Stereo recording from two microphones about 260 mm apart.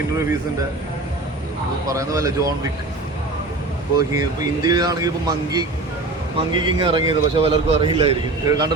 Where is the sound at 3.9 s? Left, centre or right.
Centre.